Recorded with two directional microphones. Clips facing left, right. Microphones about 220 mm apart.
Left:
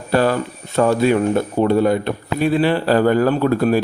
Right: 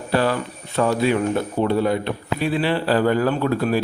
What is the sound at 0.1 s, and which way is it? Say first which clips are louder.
A man's voice: left 4 dB; 45° left (ahead or behind).